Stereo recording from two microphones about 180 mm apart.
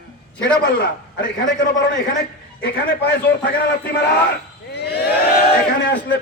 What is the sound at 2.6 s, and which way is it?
Speech, 65° left (ahead or behind).